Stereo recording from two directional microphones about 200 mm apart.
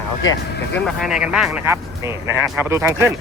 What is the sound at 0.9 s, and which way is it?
Speech, centre (ahead or behind).